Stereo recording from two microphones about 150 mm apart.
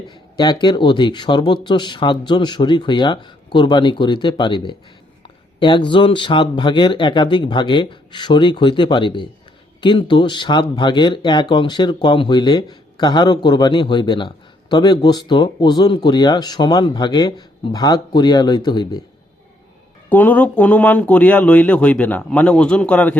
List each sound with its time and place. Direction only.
0.1 s speech: 30° left (ahead or behind)
20.1 s speech: 10° left (ahead or behind)